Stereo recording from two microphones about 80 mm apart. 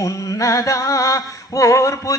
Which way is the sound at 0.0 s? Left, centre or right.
Left.